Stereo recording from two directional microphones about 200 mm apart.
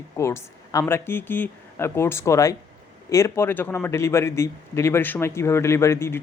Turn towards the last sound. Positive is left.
turn(degrees=15)  # may be behind; listen again after turning